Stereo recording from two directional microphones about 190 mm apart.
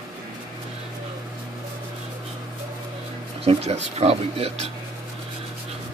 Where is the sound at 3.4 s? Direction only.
30° right (ahead or behind).